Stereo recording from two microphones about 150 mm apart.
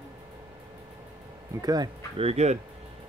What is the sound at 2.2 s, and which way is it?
Speech, 45° right (ahead or behind).